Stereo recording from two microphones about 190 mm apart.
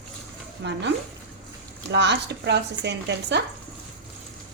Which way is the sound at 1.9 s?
65° right (ahead or behind).